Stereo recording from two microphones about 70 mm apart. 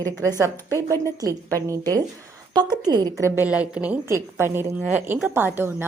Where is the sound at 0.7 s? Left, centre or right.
Right.